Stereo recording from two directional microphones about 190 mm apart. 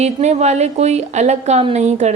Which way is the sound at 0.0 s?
35° right (ahead or behind).